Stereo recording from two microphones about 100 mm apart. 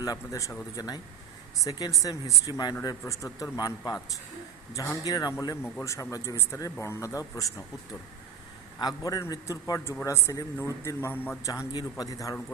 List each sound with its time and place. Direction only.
0.0 s a man's voice: 35° left (ahead or behind)
1.6 s a man's voice: 35° left (ahead or behind)
5.0 s a man's voice: 40° left (ahead or behind)
8.8 s a man's voice: 40° left (ahead or behind); by 11.3 s 20° left (ahead or behind)
11.4 s a man's voice: 35° left (ahead or behind)